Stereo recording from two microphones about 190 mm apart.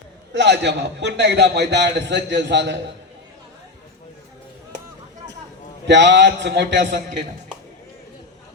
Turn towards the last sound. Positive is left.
turn(degrees=-45)  # may be behind; listen again after turning